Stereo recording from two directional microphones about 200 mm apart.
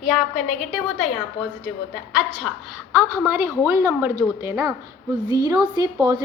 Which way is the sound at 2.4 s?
5° right (ahead or behind).